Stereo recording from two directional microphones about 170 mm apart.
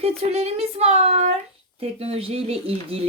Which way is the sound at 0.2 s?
35° right (ahead or behind).